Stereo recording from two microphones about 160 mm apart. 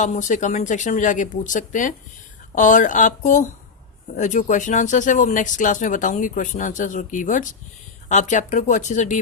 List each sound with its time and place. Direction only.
0.0 s speech: 50° left (ahead or behind)